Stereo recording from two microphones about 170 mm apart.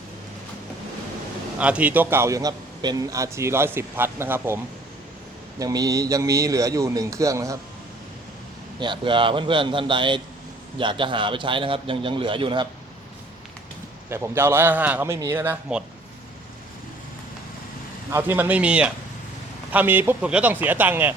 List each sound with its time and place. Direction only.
1.5 s a man's voice: 5° right (ahead or behind)
8.8 s a man's voice: 30° right (ahead or behind)
14.1 s a man's voice: 15° right (ahead or behind)
18.1 s a man's voice: 10° right (ahead or behind)